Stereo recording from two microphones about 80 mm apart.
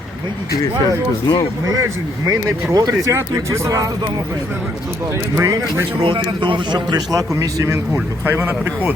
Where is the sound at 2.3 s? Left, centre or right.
Right.